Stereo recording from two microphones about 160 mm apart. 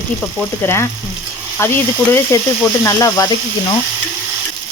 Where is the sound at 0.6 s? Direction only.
15° left (ahead or behind).